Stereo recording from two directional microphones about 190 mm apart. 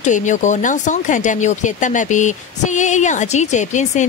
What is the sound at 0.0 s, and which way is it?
Speech, 40° left (ahead or behind).